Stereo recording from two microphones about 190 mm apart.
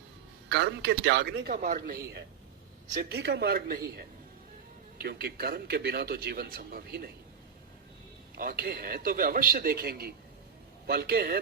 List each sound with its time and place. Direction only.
0.4 s a man's voice: 65° right (ahead or behind)
1.6 s speech: 40° right (ahead or behind)
2.9 s a man's voice: 55° right (ahead or behind)
8.4 s a man's voice: 50° right (ahead or behind)